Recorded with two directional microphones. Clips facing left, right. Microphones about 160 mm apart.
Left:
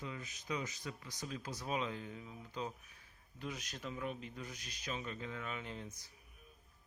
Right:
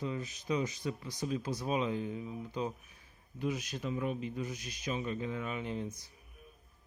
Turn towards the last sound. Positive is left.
turn(degrees=-20)  # may be behind; listen again after turning